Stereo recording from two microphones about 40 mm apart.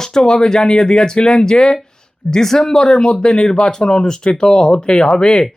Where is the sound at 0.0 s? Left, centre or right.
Centre.